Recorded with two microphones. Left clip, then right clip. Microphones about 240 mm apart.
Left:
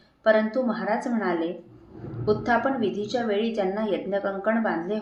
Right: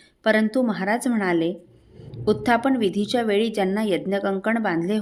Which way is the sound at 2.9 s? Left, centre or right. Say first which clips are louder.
Right 4 dB; right.